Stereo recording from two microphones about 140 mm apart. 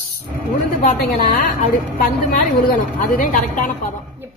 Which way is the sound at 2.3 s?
75° left (ahead or behind).